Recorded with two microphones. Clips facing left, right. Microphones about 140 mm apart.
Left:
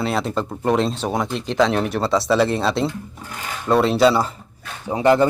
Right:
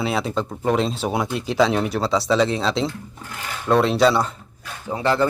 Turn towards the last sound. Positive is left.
turn(degrees=15)  # may be behind; listen again after turning